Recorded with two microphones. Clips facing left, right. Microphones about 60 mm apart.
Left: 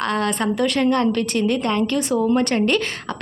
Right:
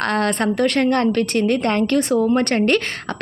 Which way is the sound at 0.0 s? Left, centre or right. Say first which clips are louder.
Right 2 dB; right.